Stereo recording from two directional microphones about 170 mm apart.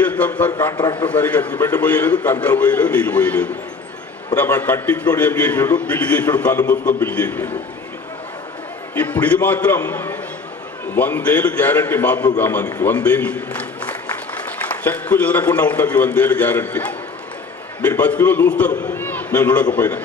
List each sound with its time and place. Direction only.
0.0 s a sound: 10° left (ahead or behind)
0.5 s a man's voice: 25° left (ahead or behind)
1.0 s a man's voice: 10° left (ahead or behind)
8.9 s a man's voice: 10° left (ahead or behind)